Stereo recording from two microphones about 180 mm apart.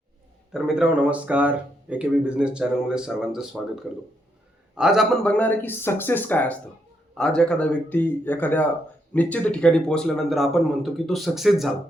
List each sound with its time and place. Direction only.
0.5 s speech: 5° right (ahead or behind)
4.7 s speech: 5° right (ahead or behind)